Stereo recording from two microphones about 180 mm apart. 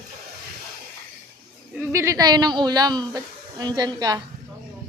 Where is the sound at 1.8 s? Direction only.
15° right (ahead or behind).